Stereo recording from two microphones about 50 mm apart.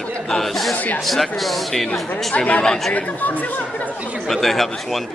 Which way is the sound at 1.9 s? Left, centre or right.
Left.